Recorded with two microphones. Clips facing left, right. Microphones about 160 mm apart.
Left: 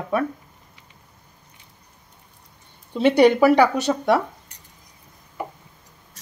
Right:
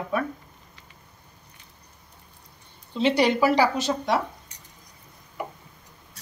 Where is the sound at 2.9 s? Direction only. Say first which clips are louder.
Left 6 dB; 55° left (ahead or behind).